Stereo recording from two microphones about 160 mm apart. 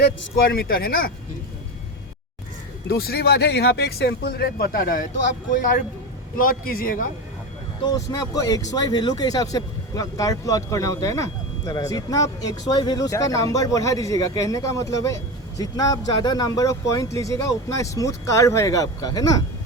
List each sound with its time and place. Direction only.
0.5 s speech: 70° left (ahead or behind)
2.9 s a man's voice: 75° left (ahead or behind)
7.9 s speech: 20° left (ahead or behind)